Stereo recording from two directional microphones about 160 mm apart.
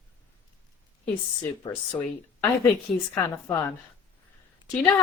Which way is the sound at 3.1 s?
15° left (ahead or behind).